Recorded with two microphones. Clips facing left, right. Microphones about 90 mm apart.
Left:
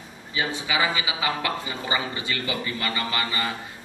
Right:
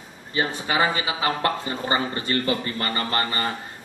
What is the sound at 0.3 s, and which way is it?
Speech, 50° right (ahead or behind).